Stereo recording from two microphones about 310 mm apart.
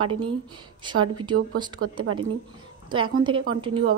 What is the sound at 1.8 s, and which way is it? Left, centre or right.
Speech, right.